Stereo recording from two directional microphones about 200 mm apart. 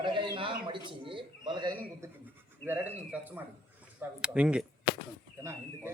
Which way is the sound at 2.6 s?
10° right (ahead or behind).